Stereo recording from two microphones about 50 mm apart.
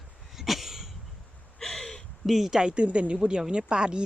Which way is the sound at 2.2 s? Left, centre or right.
Centre.